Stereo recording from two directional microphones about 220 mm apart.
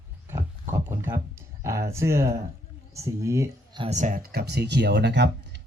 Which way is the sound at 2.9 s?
15° right (ahead or behind).